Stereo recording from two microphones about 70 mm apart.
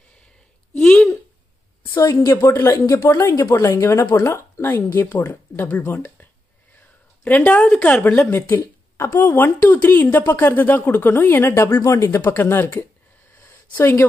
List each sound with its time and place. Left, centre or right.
0.7 s a sound: centre
2.0 s a woman's voice: left
2.4 s speech: left
3.1 s a woman's voice: left
7.2 s a woman's voice: left
8.3 s a woman's voice: left
13.4 s a sound: left